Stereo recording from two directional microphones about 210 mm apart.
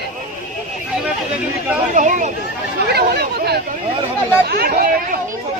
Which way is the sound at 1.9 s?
35° right (ahead or behind).